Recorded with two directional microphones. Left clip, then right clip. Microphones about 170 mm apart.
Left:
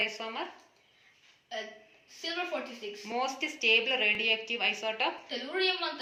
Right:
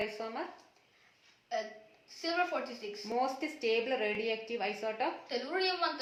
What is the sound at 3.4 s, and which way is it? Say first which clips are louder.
A woman's voice: left 6 dB; 50° right (ahead or behind).